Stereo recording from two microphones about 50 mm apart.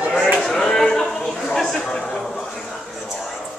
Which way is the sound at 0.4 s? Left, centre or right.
Centre.